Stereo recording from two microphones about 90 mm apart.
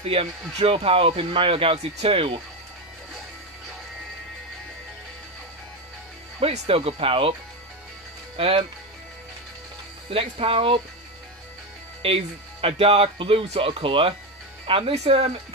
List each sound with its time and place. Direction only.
0.1 s speech: 90° right
6.7 s speech: 90° right
8.4 s speech: 90° right
10.0 s speech: 90° right
12.0 s speech: 90° right